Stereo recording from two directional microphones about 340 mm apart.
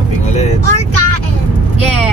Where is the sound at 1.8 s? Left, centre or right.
Left.